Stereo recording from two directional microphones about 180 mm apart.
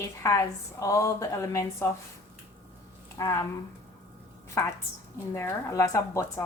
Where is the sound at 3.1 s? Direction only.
15° left (ahead or behind).